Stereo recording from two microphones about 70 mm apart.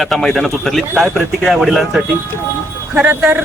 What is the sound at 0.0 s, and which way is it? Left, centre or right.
A man's voice, centre.